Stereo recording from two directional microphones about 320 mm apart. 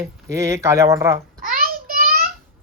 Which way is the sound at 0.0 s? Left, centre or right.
Centre.